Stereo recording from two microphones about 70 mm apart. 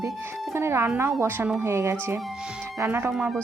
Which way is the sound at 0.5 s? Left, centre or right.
Right.